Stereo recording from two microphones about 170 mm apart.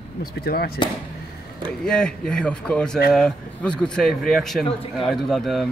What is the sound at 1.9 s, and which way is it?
Speech, 5° left (ahead or behind).